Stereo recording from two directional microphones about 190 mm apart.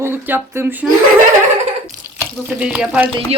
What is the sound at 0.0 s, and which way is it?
Speech, 10° right (ahead or behind).